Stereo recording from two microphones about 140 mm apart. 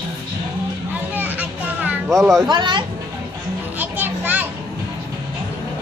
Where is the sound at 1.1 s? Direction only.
10° right (ahead or behind).